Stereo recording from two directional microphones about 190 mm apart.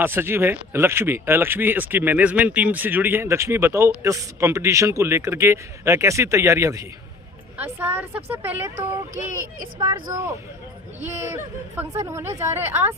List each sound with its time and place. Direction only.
0.0 s speech: 10° right (ahead or behind)
9.1 s speech: 45° right (ahead or behind)
9.7 s speech: 25° right (ahead or behind)
11.8 s speech: 10° right (ahead or behind)